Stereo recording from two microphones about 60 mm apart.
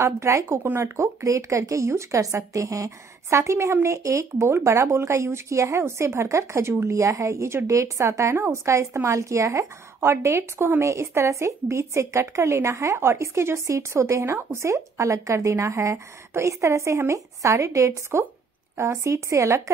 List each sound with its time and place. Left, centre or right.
0.0 s speech: right
7.0 s speech: right
9.9 s a woman's voice: right
10.8 s speech: right